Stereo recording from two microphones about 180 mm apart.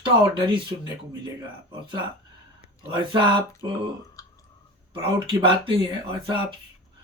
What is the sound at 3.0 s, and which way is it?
Speech, 25° right (ahead or behind).